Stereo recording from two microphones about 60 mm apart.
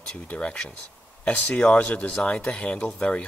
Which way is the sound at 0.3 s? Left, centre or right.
Centre.